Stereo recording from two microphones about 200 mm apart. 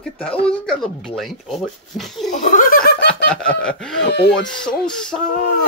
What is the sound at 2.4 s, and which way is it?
Speech, 40° left (ahead or behind).